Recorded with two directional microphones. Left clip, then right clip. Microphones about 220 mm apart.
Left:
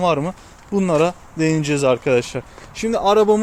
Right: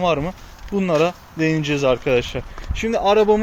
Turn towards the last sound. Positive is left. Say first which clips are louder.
# left 1 dB
turn(degrees=15)  # may be behind; listen again after turning